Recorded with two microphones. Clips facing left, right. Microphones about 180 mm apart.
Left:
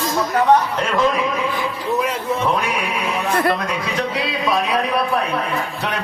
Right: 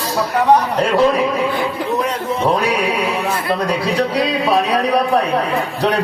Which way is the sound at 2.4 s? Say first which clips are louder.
Right 8 dB; 35° right (ahead or behind).